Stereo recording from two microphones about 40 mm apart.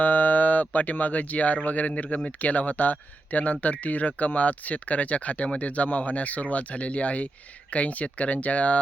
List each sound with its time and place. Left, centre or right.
0.0 s speech: left
2.0 s speech: left
2.4 s speech: left